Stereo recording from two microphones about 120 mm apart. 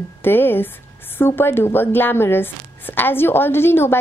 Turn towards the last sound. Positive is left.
turn(degrees=20)  # may be behind; listen again after turning